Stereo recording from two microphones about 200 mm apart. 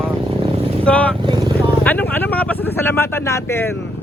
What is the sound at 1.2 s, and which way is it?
Speech, 25° right (ahead or behind).